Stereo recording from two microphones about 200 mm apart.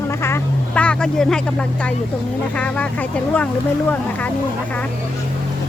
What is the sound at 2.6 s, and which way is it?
Speech, 5° left (ahead or behind).